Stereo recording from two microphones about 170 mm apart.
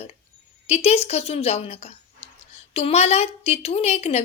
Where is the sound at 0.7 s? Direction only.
40° left (ahead or behind).